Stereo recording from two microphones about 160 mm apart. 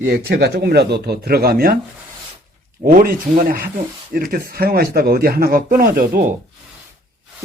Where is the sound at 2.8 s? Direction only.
65° right (ahead or behind).